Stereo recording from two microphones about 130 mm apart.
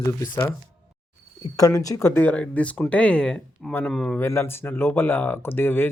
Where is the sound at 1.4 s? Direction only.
25° left (ahead or behind); by 4.2 s 5° left (ahead or behind).